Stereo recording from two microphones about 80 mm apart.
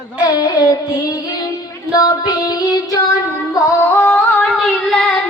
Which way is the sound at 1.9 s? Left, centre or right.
Left.